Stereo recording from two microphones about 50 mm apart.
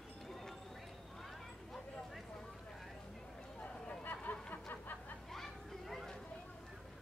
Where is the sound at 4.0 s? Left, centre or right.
Left.